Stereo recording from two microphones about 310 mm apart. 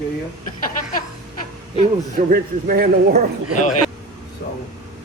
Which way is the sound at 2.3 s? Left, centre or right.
Right.